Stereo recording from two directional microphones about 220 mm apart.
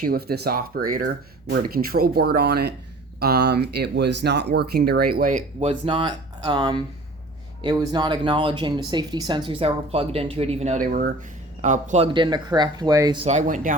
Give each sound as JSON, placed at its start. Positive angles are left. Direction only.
{"t": 0.0, "sound": "speech", "side_deg": -45}